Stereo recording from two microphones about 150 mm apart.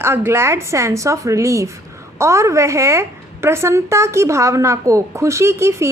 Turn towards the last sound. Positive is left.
turn(degrees=-20)  # may be behind; listen again after turning